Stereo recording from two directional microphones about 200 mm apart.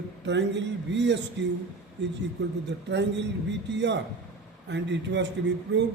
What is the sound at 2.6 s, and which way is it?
A man's voice, 60° right (ahead or behind).